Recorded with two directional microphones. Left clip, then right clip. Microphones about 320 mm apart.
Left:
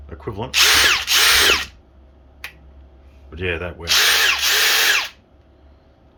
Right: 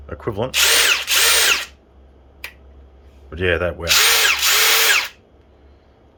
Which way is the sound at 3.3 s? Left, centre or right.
Centre.